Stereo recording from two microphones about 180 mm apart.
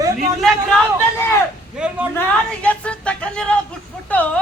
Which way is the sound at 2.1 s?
5° left (ahead or behind).